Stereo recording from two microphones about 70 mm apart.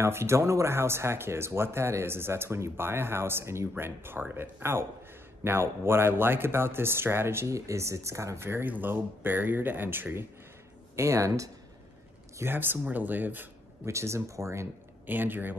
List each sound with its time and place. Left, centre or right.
0.0 s speech: right
11.0 s speech: right
12.4 s speech: right
13.8 s speech: right
15.0 s speech: right